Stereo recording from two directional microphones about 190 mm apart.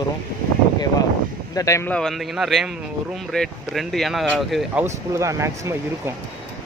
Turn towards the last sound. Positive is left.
turn(degrees=-15)  # may be behind; listen again after turning